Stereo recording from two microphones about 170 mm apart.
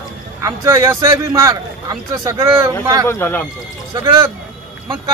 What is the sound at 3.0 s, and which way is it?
Speech, 15° left (ahead or behind).